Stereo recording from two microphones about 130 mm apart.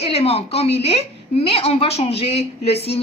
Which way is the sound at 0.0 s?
50° left (ahead or behind).